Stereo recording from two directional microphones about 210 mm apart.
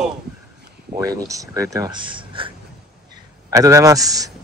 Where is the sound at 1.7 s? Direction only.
20° right (ahead or behind).